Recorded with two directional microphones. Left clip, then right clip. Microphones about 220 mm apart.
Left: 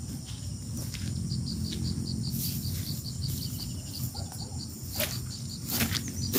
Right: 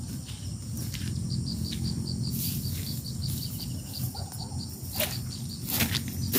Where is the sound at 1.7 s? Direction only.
Centre (ahead or behind).